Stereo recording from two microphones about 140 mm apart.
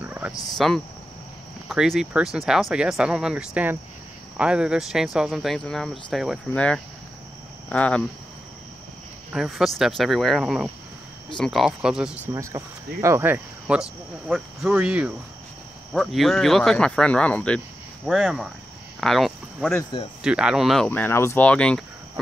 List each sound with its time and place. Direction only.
0.0 s a sound: 10° right (ahead or behind)
0.3 s speech: 25° left (ahead or behind)
1.7 s speech: centre (ahead or behind)
9.3 s speech: centre (ahead or behind)
12.3 s speech: 20° right (ahead or behind); by 17.6 s 10° left (ahead or behind)
18.0 s speech: 5° right (ahead or behind)
19.9 s speech: 35° left (ahead or behind)
20.2 s speech: 5° right (ahead or behind)
20.9 s speech: 15° left (ahead or behind)